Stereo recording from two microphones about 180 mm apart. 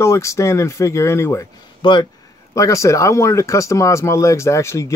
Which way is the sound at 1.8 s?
25° left (ahead or behind).